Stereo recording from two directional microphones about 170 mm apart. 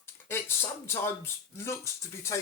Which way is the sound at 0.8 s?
15° left (ahead or behind).